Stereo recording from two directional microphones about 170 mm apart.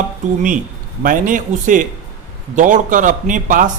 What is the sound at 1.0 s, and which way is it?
Speech, 50° right (ahead or behind).